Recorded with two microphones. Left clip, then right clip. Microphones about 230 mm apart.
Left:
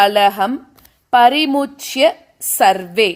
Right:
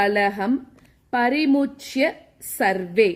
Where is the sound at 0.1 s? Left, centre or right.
Centre.